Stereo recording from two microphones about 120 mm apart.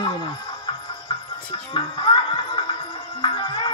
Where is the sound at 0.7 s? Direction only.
40° left (ahead or behind).